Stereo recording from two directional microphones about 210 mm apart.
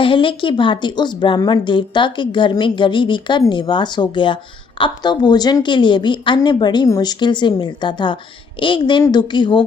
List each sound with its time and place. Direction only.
0.0 s speech: 25° left (ahead or behind)